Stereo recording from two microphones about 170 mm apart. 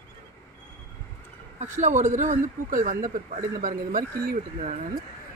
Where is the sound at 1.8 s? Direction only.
45° right (ahead or behind).